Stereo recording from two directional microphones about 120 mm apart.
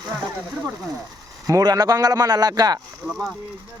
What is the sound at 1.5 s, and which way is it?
A man's voice, 30° right (ahead or behind).